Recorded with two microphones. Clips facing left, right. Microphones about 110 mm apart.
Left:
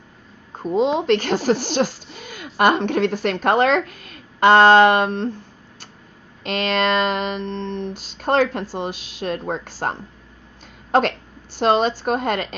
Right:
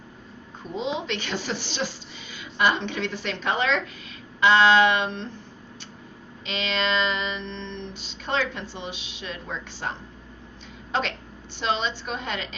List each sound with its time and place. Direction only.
0.6 s speech: 45° left (ahead or behind)
6.4 s speech: 50° left (ahead or behind)